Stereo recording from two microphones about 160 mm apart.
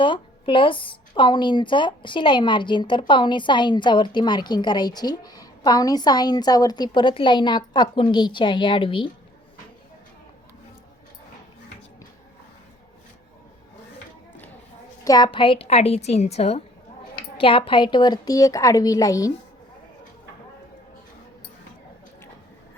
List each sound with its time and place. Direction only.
0.0 s a woman's voice: 30° left (ahead or behind)
15.0 s a woman's voice: 25° left (ahead or behind)